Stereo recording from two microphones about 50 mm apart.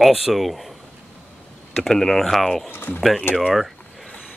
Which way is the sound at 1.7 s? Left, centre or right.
Centre.